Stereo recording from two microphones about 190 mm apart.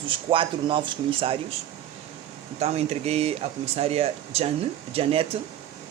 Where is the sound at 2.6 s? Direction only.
35° right (ahead or behind).